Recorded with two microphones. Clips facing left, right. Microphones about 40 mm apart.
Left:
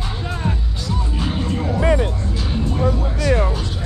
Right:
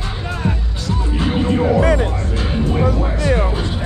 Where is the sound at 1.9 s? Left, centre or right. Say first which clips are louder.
Right 2 dB; right.